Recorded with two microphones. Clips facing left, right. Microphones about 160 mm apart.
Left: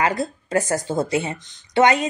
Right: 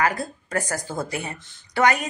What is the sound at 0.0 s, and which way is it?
Speech, 25° left (ahead or behind).